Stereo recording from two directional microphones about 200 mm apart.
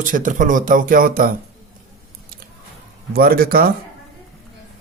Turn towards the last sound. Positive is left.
turn(degrees=-45)  # may be behind; listen again after turning